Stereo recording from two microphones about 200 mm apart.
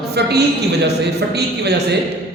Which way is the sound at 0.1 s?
55° right (ahead or behind).